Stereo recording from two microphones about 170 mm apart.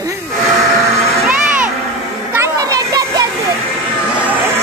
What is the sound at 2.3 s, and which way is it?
Children playing, 20° right (ahead or behind).